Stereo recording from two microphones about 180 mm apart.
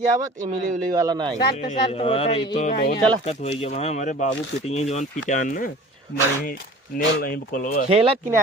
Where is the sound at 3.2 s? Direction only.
40° left (ahead or behind).